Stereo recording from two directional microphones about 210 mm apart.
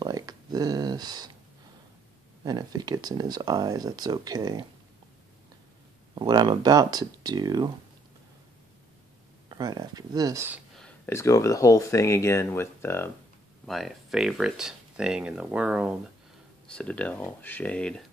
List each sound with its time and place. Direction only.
0.0 s a sound: 20° right (ahead or behind)
2.4 s speech: 20° right (ahead or behind)
6.1 s speech: 20° right (ahead or behind)
9.5 s speech: 15° right (ahead or behind)
10.8 s speech: 10° left (ahead or behind)
13.7 s speech: centre (ahead or behind)
16.6 s speech: 5° left (ahead or behind)